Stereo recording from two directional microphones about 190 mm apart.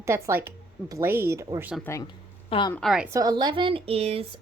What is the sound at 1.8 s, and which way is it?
Speech, 20° left (ahead or behind).